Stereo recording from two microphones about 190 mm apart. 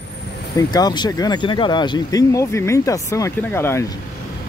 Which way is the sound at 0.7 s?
20° left (ahead or behind).